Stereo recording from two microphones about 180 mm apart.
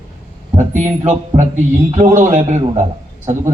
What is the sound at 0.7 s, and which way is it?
A man's voice, 40° right (ahead or behind).